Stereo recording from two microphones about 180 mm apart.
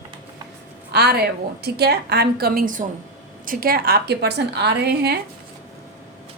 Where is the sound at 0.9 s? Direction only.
65° right (ahead or behind).